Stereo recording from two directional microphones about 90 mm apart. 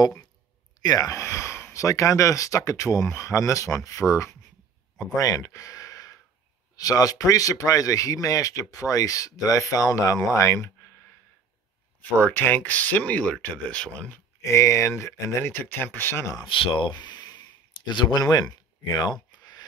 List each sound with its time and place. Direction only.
0.8 s speech: 45° left (ahead or behind)
1.1 s speech: 30° left (ahead or behind)
12.0 s speech: 20° left (ahead or behind)
14.4 s speech: 35° left (ahead or behind)
16.4 s speech: 75° left (ahead or behind)
16.9 s a sound: 55° left (ahead or behind)
17.9 s speech: 50° left (ahead or behind)
19.3 s a sound: 45° left (ahead or behind)